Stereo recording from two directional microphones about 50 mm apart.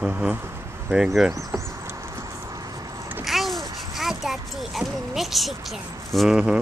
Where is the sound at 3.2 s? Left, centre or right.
Centre.